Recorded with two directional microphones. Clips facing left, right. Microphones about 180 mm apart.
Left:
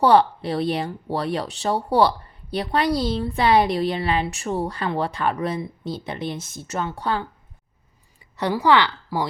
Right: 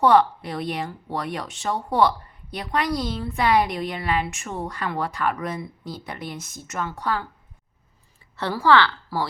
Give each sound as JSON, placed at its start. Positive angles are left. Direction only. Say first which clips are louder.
{"t": 0.0, "sound": "speech", "louder": "left 1 dB", "side_deg": 30}
{"t": 8.4, "sound": "a woman's voice", "louder": "left 1 dB", "side_deg": 15}